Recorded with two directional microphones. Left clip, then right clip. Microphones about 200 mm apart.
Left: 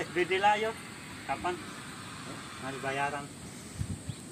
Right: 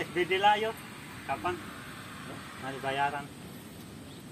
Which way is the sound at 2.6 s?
50° left (ahead or behind).